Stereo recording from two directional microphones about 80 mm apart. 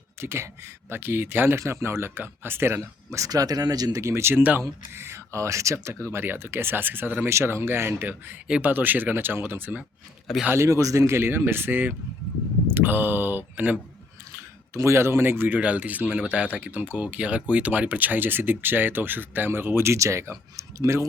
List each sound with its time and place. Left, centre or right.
0.2 s speech: right
3.2 s speech: right
4.0 s speech: right
7.3 s speech: right
8.4 s speech: centre
8.7 s speech: right
10.5 s speech: right
14.3 s speech: right